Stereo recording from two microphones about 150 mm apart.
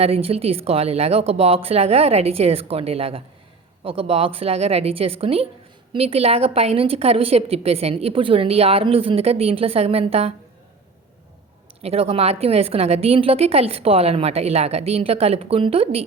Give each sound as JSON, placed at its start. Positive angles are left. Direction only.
{"t": 0.0, "sound": "a woman's voice", "side_deg": -40}
{"t": 11.8, "sound": "a woman's voice", "side_deg": -40}